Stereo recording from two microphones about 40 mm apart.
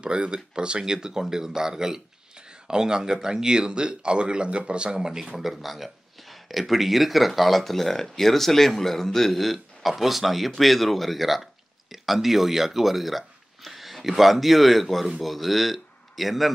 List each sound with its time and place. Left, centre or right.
0.0 s speech: right
5.4 s speech: centre